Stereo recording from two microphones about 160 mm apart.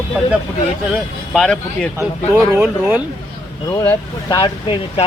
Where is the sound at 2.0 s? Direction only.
15° right (ahead or behind).